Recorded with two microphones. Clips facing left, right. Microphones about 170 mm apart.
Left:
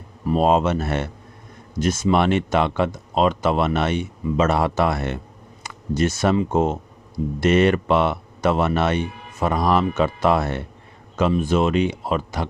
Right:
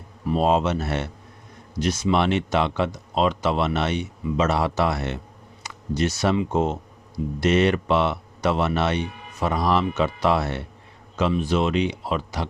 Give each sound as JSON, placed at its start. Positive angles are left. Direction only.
{"t": 0.3, "sound": "speech", "side_deg": 50}